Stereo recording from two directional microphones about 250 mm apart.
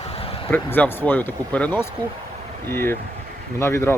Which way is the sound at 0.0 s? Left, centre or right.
Left.